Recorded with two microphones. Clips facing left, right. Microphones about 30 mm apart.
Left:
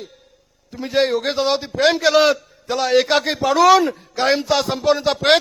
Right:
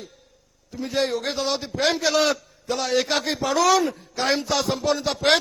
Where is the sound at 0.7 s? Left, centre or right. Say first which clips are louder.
Left 6 dB; left.